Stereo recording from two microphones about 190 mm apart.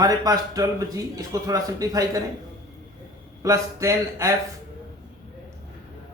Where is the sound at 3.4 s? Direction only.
15° right (ahead or behind).